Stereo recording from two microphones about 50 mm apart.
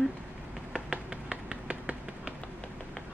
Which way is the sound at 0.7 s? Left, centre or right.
Centre.